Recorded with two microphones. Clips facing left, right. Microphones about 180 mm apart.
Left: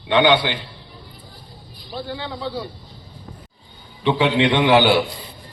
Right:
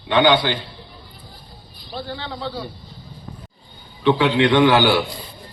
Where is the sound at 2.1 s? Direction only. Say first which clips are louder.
Left 1 dB; 15° left (ahead or behind).